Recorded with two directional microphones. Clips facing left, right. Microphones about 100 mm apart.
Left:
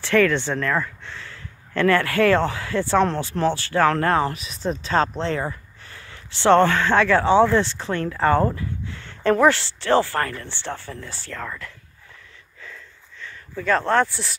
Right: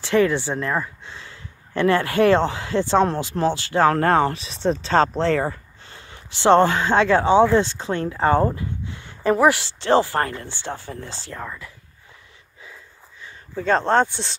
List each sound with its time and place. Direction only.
0.0 s speech: 20° right (ahead or behind)
3.9 s speech: 40° right (ahead or behind)
5.9 s speech: 25° right (ahead or behind)
13.6 s speech: 25° right (ahead or behind)